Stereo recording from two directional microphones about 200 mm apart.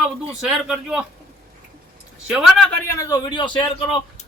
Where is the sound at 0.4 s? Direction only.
5° right (ahead or behind).